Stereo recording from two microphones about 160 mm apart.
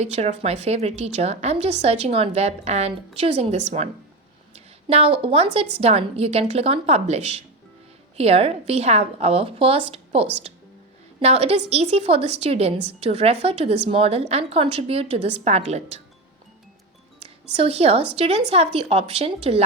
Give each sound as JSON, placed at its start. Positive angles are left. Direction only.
{"t": 0.0, "sound": "a woman's voice", "side_deg": -40}
{"t": 4.5, "sound": "a sound", "side_deg": -40}
{"t": 5.8, "sound": "a woman's voice", "side_deg": -40}
{"t": 17.6, "sound": "a woman's voice", "side_deg": -40}